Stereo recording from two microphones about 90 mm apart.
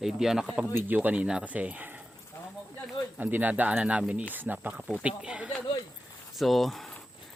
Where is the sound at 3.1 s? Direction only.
20° right (ahead or behind).